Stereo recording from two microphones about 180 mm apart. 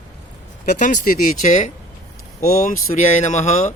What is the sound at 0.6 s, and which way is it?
A man's voice, 45° left (ahead or behind).